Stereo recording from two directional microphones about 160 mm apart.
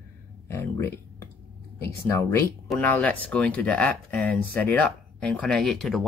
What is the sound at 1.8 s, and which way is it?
Speech, 15° left (ahead or behind).